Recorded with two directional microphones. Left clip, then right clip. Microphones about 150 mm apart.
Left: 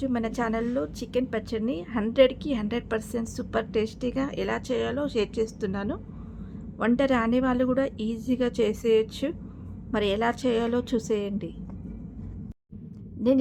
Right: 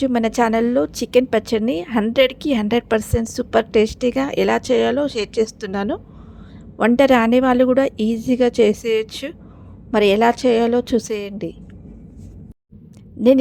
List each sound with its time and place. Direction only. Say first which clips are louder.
0.0 s a woman's voice: right 11 dB; 50° right (ahead or behind)